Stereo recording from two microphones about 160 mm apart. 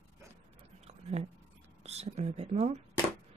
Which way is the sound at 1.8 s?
40° right (ahead or behind).